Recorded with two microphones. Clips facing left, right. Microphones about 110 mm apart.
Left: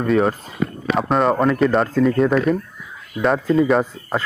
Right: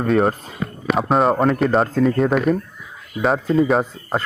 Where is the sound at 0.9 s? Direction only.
Centre (ahead or behind).